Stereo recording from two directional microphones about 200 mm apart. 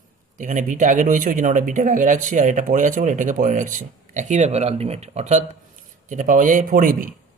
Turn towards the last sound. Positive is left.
turn(degrees=-45)  # may be behind; listen again after turning